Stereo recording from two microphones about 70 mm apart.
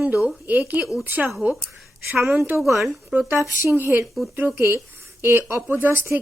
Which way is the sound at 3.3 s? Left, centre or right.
Right.